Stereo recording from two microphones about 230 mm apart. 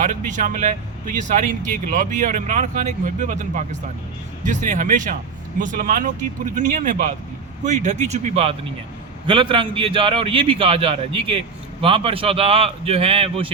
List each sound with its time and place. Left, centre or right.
0.0 s a man's voice: right